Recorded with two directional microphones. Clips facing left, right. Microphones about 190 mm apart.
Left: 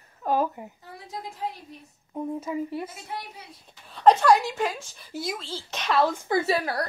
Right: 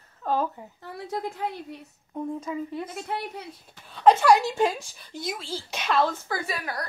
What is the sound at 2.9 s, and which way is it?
Speech, 65° right (ahead or behind).